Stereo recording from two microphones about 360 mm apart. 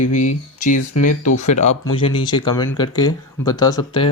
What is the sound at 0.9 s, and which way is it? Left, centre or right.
Speech, left.